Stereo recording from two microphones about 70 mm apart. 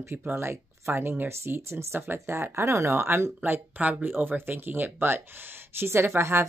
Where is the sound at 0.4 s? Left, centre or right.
Right.